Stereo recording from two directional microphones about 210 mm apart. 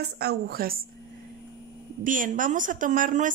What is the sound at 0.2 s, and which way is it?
Speech, 50° right (ahead or behind).